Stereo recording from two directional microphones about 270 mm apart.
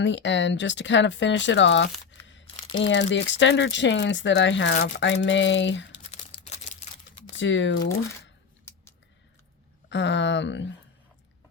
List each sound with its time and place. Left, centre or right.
0.0 s speech: left
6.0 s crumpling: left
7.3 s speech: left
9.9 s speech: left